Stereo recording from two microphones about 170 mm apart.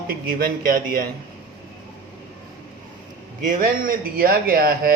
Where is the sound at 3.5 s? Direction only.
55° right (ahead or behind).